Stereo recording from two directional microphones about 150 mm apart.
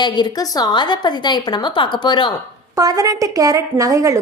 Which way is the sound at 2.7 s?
25° right (ahead or behind).